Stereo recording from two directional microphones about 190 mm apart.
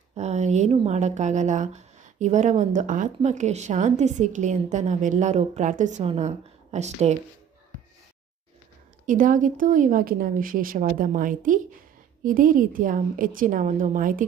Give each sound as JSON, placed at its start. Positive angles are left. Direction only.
{"t": 0.1, "sound": "speech", "side_deg": -35}
{"t": 9.0, "sound": "a woman's voice", "side_deg": -45}